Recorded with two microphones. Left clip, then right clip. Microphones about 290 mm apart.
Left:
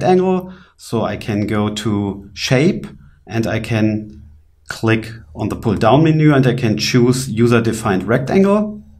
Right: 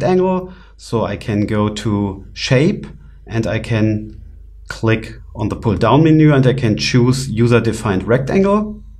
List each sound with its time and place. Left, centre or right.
0.0 s speech: right